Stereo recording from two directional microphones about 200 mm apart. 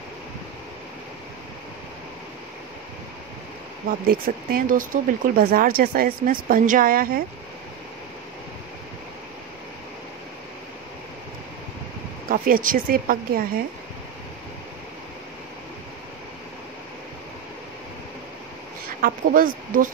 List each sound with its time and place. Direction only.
4.1 s speech: 45° right (ahead or behind)
12.3 s speech: 45° right (ahead or behind)
18.9 s speech: 45° right (ahead or behind)